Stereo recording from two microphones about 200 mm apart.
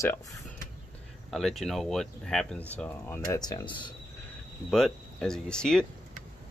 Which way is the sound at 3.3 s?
20° left (ahead or behind).